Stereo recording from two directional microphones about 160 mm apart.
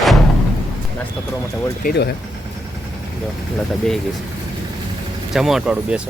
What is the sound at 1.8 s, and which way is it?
Speech, 90° left.